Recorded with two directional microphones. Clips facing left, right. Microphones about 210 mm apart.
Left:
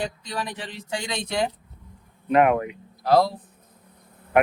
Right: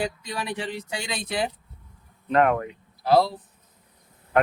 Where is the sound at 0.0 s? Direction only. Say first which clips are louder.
Even; 10° right (ahead or behind).